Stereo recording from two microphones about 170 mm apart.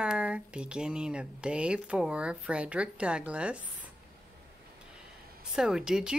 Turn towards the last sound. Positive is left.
turn(degrees=-5)  # may be behind; listen again after turning